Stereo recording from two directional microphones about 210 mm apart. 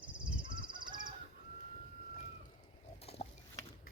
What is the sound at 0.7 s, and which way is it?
Crow, 20° right (ahead or behind).